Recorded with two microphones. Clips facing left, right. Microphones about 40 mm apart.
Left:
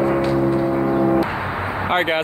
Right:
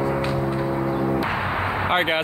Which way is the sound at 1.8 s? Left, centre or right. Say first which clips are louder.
Left 3 dB; centre.